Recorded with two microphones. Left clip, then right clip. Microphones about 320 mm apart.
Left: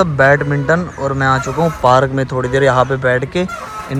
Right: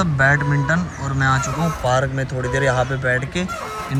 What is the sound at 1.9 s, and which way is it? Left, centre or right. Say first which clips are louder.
Speech: left 8 dB; left.